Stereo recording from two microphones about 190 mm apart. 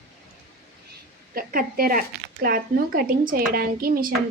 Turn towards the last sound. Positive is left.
turn(degrees=-50)  # may be behind; listen again after turning